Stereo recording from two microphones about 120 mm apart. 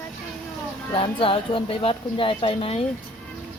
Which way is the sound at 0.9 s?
45° left (ahead or behind).